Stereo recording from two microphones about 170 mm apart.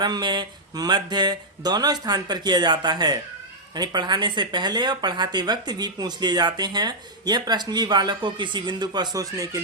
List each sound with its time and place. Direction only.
0.0 s speech: 25° right (ahead or behind)